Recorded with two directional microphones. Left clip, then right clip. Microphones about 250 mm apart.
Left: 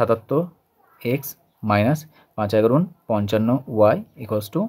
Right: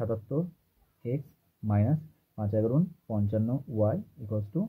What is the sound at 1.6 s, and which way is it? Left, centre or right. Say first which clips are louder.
Speech: left 13 dB; left.